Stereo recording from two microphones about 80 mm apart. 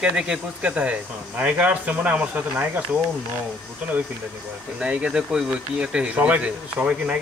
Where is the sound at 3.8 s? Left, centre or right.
Right.